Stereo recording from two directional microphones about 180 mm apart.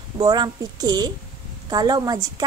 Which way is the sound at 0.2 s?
20° right (ahead or behind).